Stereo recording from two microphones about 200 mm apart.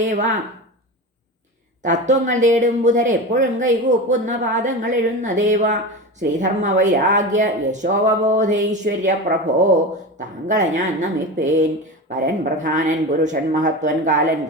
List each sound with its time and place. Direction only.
0.0 s speech: 40° right (ahead or behind)
1.8 s speech: 40° right (ahead or behind)